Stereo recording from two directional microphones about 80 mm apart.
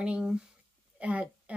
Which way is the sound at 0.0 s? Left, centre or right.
Centre.